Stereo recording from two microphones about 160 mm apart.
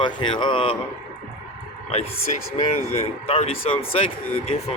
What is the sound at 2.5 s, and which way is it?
Speech, 45° left (ahead or behind).